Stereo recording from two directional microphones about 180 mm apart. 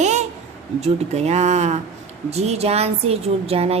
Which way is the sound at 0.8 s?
35° right (ahead or behind).